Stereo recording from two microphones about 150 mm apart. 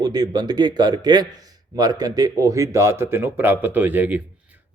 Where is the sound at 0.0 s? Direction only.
25° right (ahead or behind).